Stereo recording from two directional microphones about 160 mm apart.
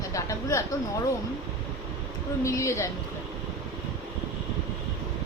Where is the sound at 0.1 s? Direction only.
20° left (ahead or behind).